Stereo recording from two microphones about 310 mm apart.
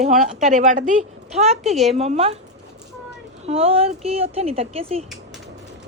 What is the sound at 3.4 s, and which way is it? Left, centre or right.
A woman's voice, centre.